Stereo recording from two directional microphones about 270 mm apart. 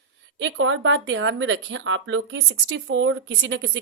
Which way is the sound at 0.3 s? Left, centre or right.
Right.